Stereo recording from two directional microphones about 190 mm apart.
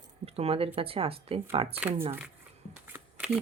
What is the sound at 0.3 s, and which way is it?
Speech, 30° right (ahead or behind).